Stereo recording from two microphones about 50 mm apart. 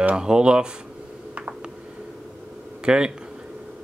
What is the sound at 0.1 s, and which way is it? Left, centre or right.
Speech, centre.